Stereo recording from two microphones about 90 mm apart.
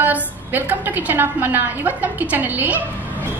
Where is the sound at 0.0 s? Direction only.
20° right (ahead or behind).